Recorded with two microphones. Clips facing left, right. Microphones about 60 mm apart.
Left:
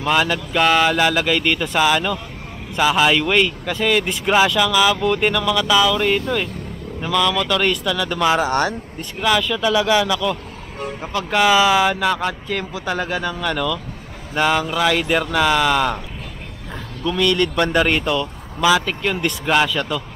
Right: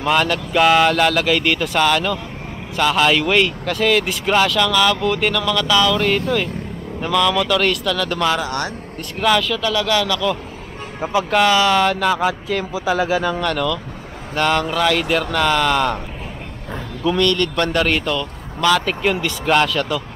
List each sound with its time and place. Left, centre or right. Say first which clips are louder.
0.0 s speech: right 1 dB; centre
8.4 s a man's voice: left 5 dB; left
9.2 s speech: right 1 dB; centre
11.2 s speech: left 1 dB; centre
13.5 s speech: right 1 dB; centre
17.2 s speech: left 2 dB; centre